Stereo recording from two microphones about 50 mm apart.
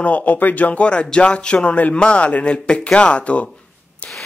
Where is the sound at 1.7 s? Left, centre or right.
Left.